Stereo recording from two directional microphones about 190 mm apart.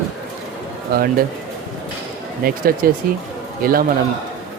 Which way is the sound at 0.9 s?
50° right (ahead or behind).